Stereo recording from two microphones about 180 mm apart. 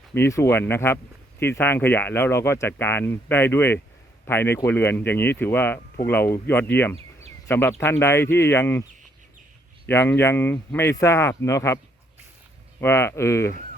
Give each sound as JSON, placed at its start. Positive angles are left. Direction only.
{"t": 0.1, "sound": "speech", "side_deg": 15}
{"t": 6.9, "sound": "a sound", "side_deg": -35}
{"t": 7.4, "sound": "speech", "side_deg": 15}
{"t": 12.8, "sound": "speech", "side_deg": 15}